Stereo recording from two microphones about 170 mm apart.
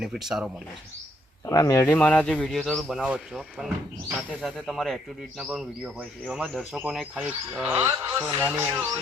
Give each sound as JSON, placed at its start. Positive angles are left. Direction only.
{"t": 0.0, "sound": "speech", "side_deg": 0}
{"t": 1.5, "sound": "a man's voice", "side_deg": 20}
{"t": 7.9, "sound": "speech", "side_deg": -20}